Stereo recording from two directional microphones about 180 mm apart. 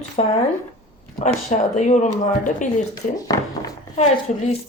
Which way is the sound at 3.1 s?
20° left (ahead or behind).